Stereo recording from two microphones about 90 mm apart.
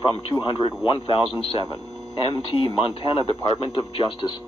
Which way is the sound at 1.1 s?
90° left.